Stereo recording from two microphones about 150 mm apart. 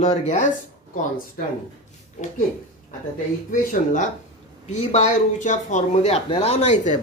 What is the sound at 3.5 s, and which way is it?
Speech, 60° left (ahead or behind).